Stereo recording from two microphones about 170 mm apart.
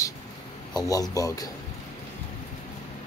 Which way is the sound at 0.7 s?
20° left (ahead or behind).